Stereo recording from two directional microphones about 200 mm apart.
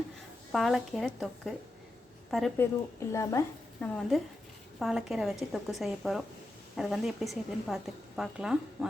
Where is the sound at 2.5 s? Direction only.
15° left (ahead or behind).